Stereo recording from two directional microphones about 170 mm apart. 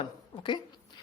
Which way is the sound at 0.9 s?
25° left (ahead or behind).